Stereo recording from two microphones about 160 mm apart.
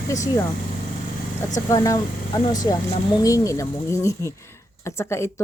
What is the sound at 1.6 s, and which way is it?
Speech, 20° left (ahead or behind).